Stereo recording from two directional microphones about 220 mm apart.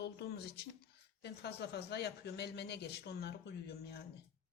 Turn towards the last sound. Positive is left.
turn(degrees=45)  # may be behind; listen again after turning